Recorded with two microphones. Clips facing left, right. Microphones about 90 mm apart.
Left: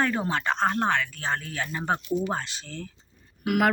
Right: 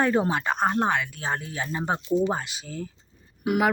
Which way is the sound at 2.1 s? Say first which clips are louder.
Right 4 dB; 30° right (ahead or behind).